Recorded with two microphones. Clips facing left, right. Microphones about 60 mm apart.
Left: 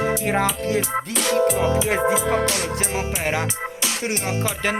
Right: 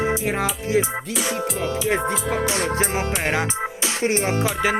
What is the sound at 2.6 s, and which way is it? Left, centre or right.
Music, right.